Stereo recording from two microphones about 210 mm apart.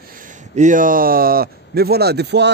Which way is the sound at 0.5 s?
35° right (ahead or behind).